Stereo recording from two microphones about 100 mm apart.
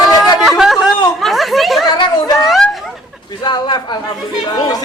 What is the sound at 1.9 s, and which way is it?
Speech, 45° left (ahead or behind).